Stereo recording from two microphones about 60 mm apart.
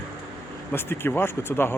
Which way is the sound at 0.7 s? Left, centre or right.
Left.